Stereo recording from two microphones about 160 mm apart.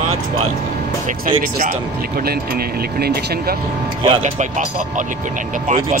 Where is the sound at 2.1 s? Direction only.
75° right (ahead or behind).